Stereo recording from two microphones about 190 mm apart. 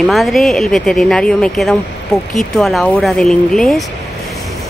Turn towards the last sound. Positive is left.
turn(degrees=0)  # may be behind; listen again after turning